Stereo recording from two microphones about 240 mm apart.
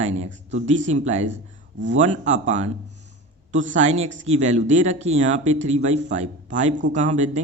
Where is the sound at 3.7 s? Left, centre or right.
Right.